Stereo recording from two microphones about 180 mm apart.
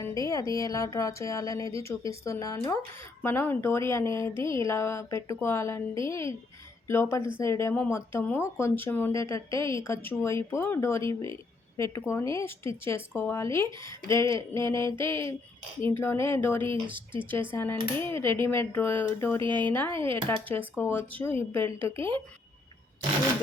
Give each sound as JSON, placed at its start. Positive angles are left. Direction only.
{"t": 0.2, "sound": "speech", "side_deg": 20}
{"t": 16.6, "sound": "speech", "side_deg": -25}
{"t": 17.5, "sound": "speech", "side_deg": 10}
{"t": 19.4, "sound": "speech", "side_deg": -25}
{"t": 19.7, "sound": "speech", "side_deg": 10}